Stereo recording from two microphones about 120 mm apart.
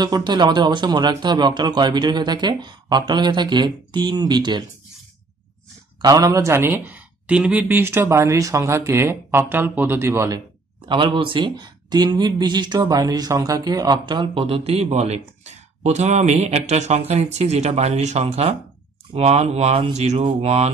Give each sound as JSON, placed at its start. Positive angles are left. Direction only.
{"t": 0.0, "sound": "speech", "side_deg": -35}
{"t": 5.9, "sound": "speech", "side_deg": -30}
{"t": 10.9, "sound": "speech", "side_deg": -45}